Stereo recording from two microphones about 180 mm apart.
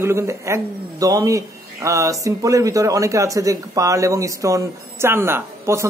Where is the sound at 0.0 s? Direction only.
15° right (ahead or behind).